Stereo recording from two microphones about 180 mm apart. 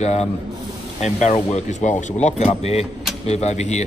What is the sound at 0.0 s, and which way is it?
Speech, 40° left (ahead or behind).